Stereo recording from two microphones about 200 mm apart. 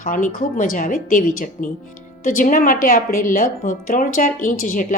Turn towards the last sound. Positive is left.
turn(degrees=45)  # may be behind; listen again after turning